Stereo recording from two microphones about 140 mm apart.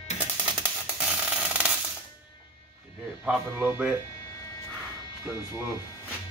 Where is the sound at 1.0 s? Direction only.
5° right (ahead or behind).